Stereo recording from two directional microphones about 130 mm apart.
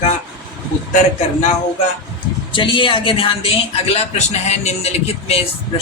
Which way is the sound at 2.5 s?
40° left (ahead or behind).